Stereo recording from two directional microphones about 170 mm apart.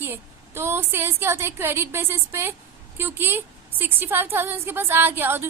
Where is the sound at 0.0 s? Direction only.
15° right (ahead or behind).